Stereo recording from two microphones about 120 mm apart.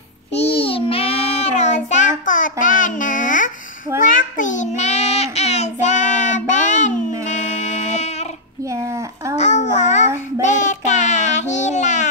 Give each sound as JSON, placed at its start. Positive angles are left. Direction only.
{"t": 0.4, "sound": "child singing", "side_deg": 50}
{"t": 1.5, "sound": "child singing", "side_deg": 85}
{"t": 9.4, "sound": "babbling", "side_deg": 80}
{"t": 10.4, "sound": "child singing", "side_deg": 90}